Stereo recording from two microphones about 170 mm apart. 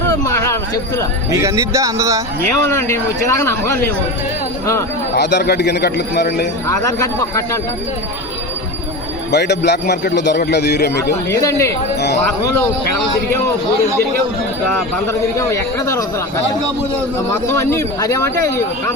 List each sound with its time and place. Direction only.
0.1 s a sound: 15° left (ahead or behind)
1.3 s a man's voice: 20° right (ahead or behind)
2.6 s speech: 15° left (ahead or behind)
5.1 s a man's voice: 80° left
6.7 s speech: 20° left (ahead or behind)
9.3 s a man's voice: 80° left
11.3 s speech: 20° left (ahead or behind)
11.9 s wind chime: 80° left
12.2 s speech: 15° left (ahead or behind)
15.4 s speech: 15° left (ahead or behind)
17.3 s speech: 15° left (ahead or behind)